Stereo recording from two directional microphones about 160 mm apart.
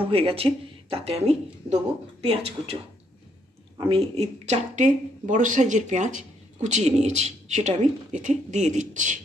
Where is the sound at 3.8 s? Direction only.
35° right (ahead or behind); by 9.2 s 50° right (ahead or behind).